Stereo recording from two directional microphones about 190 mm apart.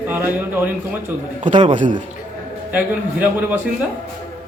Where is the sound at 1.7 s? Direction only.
45° right (ahead or behind).